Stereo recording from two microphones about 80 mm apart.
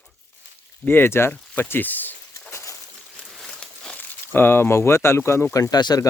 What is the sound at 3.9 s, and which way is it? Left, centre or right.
Speech, left.